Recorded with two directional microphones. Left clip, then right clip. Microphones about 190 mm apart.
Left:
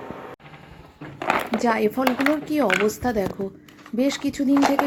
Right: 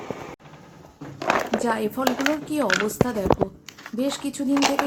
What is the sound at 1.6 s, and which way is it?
A woman's voice, 10° left (ahead or behind).